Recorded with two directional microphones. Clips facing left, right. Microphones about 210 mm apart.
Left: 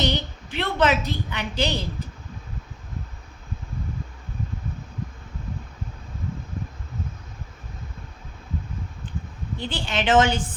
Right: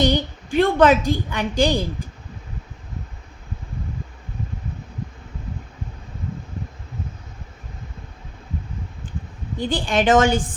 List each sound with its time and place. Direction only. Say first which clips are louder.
0.0 s a woman's voice: right 6 dB; 45° right (ahead or behind)
9.6 s a woman's voice: right 7 dB; 50° right (ahead or behind)